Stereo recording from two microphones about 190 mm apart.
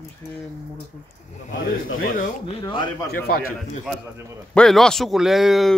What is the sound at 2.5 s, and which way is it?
Speech, 25° left (ahead or behind).